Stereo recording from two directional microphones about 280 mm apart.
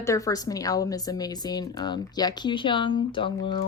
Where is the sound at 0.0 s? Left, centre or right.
Centre.